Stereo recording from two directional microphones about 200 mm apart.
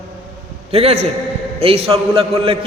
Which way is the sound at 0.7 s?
30° right (ahead or behind).